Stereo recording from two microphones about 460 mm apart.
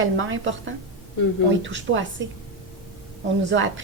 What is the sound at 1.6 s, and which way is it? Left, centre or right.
Speech, right.